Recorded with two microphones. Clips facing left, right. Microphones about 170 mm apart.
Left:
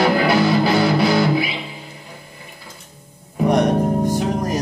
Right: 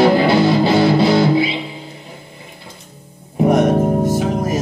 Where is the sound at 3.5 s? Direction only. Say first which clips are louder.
Right 2 dB; 5° right (ahead or behind).